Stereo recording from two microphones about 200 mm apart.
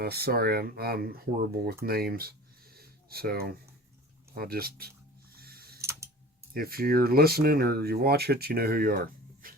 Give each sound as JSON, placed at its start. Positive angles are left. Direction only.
{"t": 0.0, "sound": "speech", "side_deg": -50}
{"t": 5.4, "sound": "mechanisms", "side_deg": -50}
{"t": 5.8, "sound": "tick-tock", "side_deg": -15}
{"t": 6.5, "sound": "speech", "side_deg": -50}
{"t": 9.4, "sound": "dog", "side_deg": -45}